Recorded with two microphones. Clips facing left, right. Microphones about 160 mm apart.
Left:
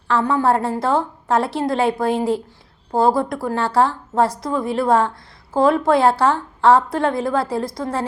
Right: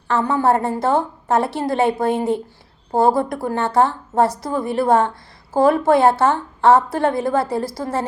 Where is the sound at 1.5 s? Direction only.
Centre (ahead or behind).